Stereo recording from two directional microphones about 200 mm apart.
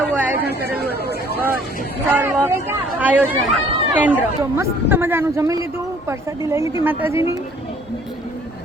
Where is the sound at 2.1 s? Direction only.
10° right (ahead or behind).